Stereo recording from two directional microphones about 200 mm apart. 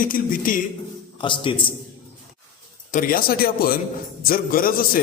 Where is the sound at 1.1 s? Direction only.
25° left (ahead or behind).